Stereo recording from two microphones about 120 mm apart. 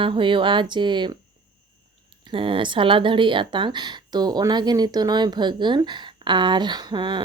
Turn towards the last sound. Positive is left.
turn(degrees=-40)  # may be behind; listen again after turning